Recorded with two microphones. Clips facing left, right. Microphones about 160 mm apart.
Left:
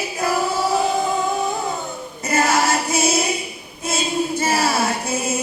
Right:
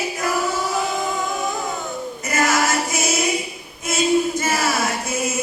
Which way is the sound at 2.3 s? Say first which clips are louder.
Left 2 dB; 30° left (ahead or behind).